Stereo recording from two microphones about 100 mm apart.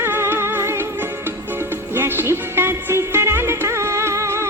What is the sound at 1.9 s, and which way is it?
Music, 25° right (ahead or behind).